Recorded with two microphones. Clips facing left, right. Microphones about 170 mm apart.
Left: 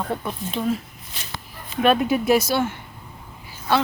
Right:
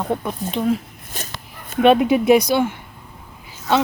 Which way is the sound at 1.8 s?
20° right (ahead or behind).